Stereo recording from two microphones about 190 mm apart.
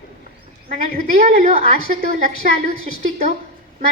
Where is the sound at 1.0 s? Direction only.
40° right (ahead or behind).